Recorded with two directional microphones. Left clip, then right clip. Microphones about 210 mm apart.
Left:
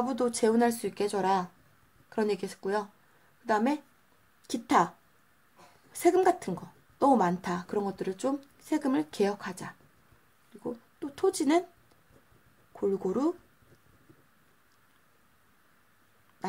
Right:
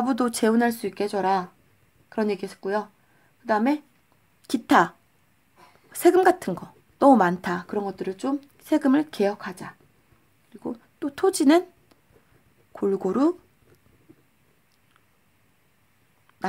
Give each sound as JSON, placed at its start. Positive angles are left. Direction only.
{"t": 0.0, "sound": "speech", "side_deg": -35}
{"t": 4.5, "sound": "a woman's voice", "side_deg": -30}
{"t": 7.7, "sound": "speech", "side_deg": -15}
{"t": 8.5, "sound": "speech", "side_deg": -30}
{"t": 10.6, "sound": "speech", "side_deg": -30}
{"t": 12.7, "sound": "speech", "side_deg": -30}